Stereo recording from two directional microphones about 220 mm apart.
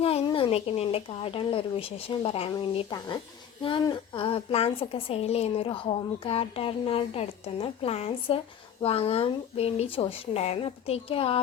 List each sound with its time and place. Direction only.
0.0 s a woman's voice: 25° left (ahead or behind)